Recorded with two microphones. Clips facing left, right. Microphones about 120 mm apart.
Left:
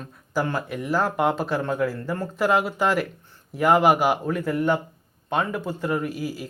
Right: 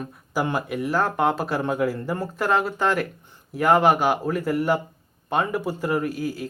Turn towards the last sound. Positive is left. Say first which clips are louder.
# right 2 dB
turn(degrees=5)  # may be behind; listen again after turning